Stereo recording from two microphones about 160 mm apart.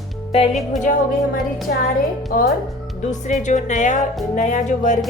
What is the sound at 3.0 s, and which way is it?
Speech, 50° left (ahead or behind).